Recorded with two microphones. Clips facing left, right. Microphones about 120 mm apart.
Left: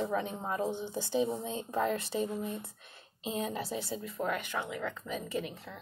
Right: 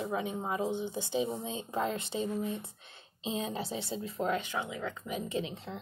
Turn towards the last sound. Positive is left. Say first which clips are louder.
# right 1 dB
turn(degrees=-25)  # may be behind; listen again after turning